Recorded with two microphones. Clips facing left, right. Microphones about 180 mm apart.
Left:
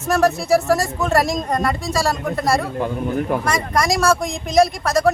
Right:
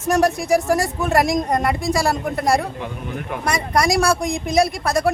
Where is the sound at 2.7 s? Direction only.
35° left (ahead or behind).